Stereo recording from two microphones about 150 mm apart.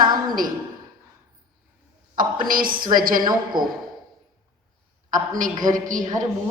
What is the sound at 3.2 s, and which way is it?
Speech, 30° right (ahead or behind).